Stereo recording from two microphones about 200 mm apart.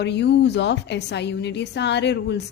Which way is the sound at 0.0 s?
60° left (ahead or behind).